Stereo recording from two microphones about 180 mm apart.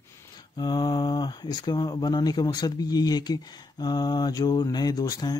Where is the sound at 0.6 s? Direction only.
25° left (ahead or behind).